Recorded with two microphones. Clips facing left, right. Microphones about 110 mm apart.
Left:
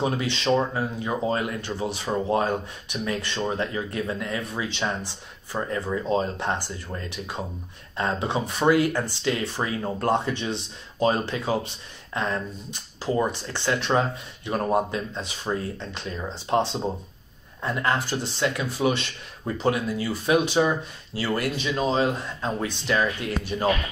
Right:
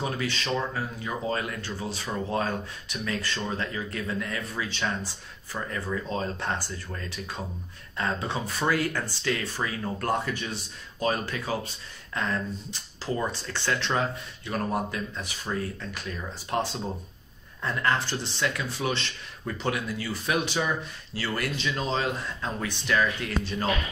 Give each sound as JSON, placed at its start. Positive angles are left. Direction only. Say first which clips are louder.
{"t": 0.0, "sound": "speech", "louder": "left 5 dB", "side_deg": 20}